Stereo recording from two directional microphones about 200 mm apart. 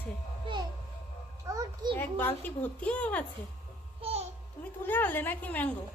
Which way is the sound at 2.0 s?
10° left (ahead or behind).